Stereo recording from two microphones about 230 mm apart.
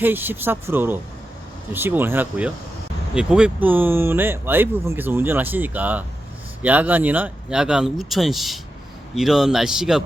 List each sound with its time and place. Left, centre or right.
0.0 s speech: centre